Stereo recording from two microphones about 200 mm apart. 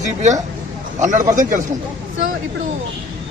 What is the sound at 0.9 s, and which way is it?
Speech, 35° right (ahead or behind).